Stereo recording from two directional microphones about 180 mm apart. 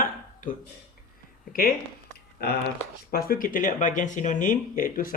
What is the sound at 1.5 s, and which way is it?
Speech, 55° left (ahead or behind).